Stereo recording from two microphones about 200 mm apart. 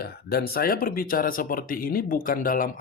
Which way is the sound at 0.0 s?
50° left (ahead or behind).